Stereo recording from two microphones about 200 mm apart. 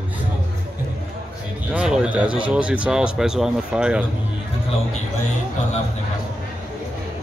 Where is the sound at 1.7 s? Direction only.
5° right (ahead or behind).